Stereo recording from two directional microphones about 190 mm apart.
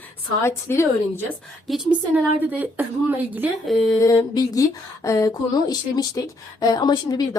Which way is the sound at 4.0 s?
20° left (ahead or behind).